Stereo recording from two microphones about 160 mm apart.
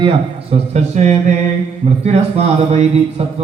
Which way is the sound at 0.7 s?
45° right (ahead or behind).